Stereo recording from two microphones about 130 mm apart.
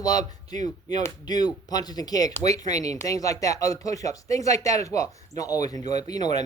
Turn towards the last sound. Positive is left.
turn(degrees=30)  # may be behind; listen again after turning